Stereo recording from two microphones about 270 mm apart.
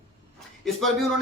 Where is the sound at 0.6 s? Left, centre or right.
Centre.